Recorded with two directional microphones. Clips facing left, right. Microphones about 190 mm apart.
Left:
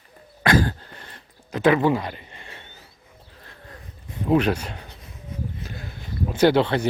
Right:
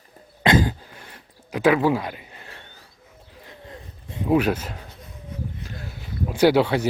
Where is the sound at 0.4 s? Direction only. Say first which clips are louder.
Right 1 dB; 20° right (ahead or behind).